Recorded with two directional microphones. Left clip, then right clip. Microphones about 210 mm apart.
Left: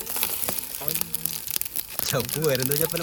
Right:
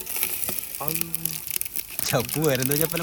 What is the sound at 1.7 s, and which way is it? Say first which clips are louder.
Crumpling: right 2 dB; 5° left (ahead or behind).